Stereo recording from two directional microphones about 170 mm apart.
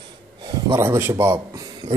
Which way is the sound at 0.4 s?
25° right (ahead or behind).